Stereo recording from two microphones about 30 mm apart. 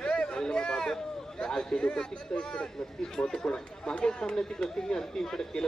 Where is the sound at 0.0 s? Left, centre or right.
Left.